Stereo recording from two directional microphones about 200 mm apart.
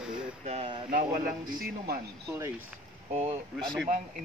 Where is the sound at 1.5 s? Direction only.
45° right (ahead or behind).